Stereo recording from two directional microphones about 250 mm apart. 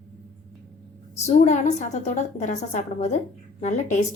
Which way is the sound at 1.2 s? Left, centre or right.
Left.